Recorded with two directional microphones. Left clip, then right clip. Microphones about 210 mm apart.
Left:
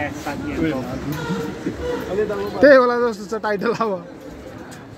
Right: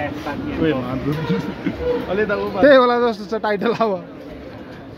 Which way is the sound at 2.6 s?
10° left (ahead or behind).